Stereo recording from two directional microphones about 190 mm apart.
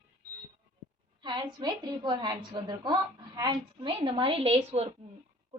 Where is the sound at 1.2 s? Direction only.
25° right (ahead or behind).